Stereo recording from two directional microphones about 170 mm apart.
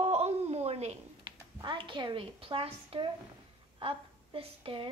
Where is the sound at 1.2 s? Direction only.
25° right (ahead or behind).